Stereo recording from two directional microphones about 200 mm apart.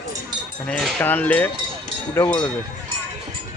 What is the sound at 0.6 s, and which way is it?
Speech, 5° left (ahead or behind).